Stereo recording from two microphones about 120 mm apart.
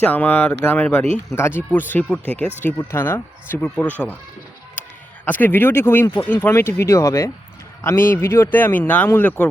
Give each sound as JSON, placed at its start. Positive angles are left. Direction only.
{"t": 0.0, "sound": "speech", "side_deg": 15}
{"t": 5.2, "sound": "speech", "side_deg": 15}